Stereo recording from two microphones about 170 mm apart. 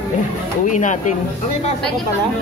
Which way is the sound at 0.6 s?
45° left (ahead or behind).